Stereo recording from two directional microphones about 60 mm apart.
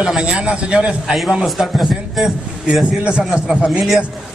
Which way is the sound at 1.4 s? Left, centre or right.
Centre.